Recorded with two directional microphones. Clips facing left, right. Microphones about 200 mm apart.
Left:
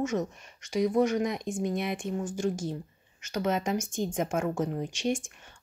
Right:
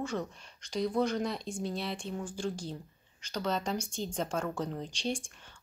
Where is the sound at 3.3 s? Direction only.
10° left (ahead or behind).